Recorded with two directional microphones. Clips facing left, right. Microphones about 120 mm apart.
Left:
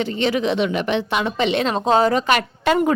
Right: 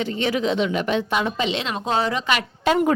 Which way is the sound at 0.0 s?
65° left (ahead or behind).